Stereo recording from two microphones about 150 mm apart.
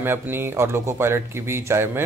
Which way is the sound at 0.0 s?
15° right (ahead or behind).